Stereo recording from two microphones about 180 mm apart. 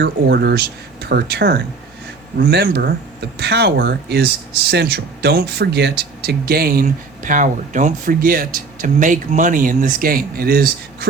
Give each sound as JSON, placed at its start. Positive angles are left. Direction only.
{"t": 0.0, "sound": "speech", "side_deg": -65}